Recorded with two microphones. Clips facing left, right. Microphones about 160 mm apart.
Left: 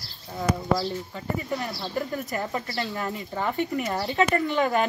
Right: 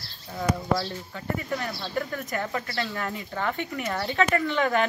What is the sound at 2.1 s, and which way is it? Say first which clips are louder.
Speech: left 1 dB; 20° left (ahead or behind).